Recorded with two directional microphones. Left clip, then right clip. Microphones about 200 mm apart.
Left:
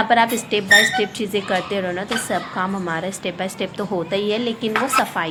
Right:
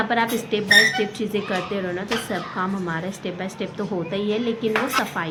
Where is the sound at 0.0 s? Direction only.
35° left (ahead or behind).